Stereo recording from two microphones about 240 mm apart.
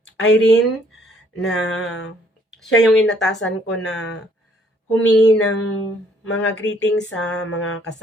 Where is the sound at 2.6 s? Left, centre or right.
Centre.